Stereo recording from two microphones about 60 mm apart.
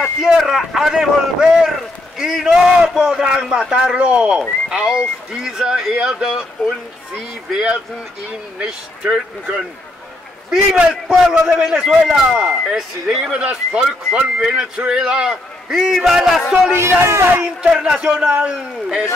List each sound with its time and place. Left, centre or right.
0.0 s a man's voice: centre
7.5 s a man's voice: centre
10.5 s a man's voice: centre
13.2 s a man's voice: centre
16.7 s speech: right
17.6 s a man's voice: centre